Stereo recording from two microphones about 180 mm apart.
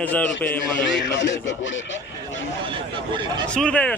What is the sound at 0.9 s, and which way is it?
Speech, 90° left.